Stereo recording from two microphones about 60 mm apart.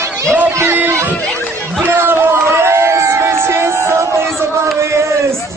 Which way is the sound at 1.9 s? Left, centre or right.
Right.